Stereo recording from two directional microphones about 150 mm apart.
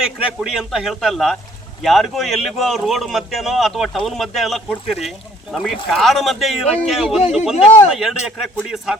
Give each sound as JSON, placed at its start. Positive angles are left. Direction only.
{"t": 0.0, "sound": "speech", "side_deg": -5}
{"t": 7.5, "sound": "speech", "side_deg": 45}
{"t": 7.9, "sound": "speech", "side_deg": 0}